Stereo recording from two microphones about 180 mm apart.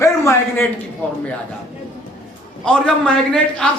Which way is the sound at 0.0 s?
15° left (ahead or behind).